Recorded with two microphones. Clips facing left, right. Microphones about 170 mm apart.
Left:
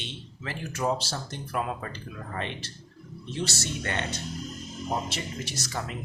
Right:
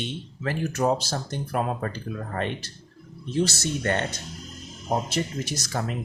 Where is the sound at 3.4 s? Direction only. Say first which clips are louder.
Right 7 dB; 45° right (ahead or behind).